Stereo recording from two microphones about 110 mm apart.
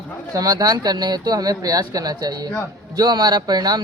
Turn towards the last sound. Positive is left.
turn(degrees=-40)  # may be behind; listen again after turning